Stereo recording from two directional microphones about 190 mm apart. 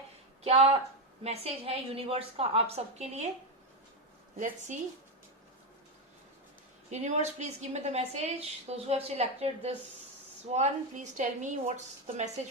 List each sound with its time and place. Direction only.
0.4 s a woman's voice: 35° right (ahead or behind)
4.4 s a woman's voice: 40° right (ahead or behind)
6.9 s a woman's voice: 35° right (ahead or behind)